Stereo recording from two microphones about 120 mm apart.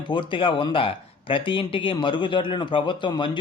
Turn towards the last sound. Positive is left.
turn(degrees=40)  # may be behind; listen again after turning